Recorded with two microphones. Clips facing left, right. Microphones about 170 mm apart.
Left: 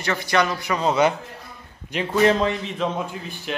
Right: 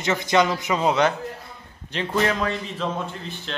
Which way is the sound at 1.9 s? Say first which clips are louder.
Left 2 dB; 10° left (ahead or behind).